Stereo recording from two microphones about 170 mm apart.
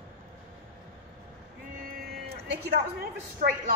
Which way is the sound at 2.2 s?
75° right (ahead or behind).